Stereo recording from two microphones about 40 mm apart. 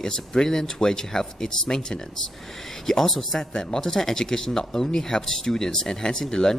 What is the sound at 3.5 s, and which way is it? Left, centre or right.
Speech, centre.